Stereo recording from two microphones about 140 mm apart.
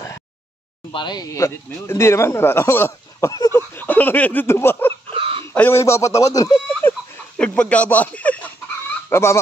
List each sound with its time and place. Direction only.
0.9 s speech: 30° left (ahead or behind); by 4.9 s 15° left (ahead or behind)
5.1 s a sound: 40° right (ahead or behind)
5.5 s speech: 15° left (ahead or behind)